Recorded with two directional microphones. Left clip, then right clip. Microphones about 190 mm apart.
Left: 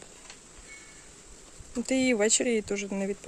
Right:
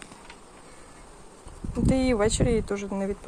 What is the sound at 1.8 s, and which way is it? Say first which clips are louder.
Speech: right 2 dB; 35° left (ahead or behind).